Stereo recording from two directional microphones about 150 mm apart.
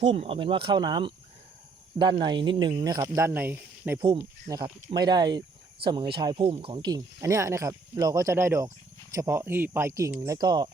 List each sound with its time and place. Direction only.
0.0 s speech: 40° right (ahead or behind); by 4.0 s 15° right (ahead or behind)
4.2 s speech: 25° right (ahead or behind)